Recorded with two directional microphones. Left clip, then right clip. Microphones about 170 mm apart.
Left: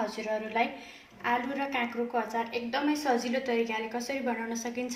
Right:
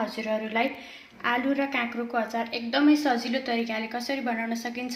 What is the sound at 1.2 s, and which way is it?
A woman's voice, 40° right (ahead or behind).